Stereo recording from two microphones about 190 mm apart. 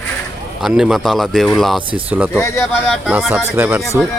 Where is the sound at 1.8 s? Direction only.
25° right (ahead or behind).